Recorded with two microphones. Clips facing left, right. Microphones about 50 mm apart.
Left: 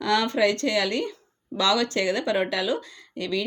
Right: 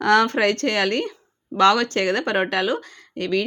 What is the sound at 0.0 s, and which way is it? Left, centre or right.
Speech, right.